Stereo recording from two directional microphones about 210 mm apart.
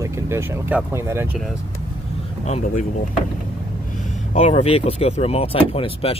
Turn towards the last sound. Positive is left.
turn(degrees=25)  # may be behind; listen again after turning